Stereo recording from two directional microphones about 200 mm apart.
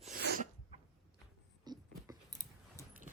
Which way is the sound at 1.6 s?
20° right (ahead or behind).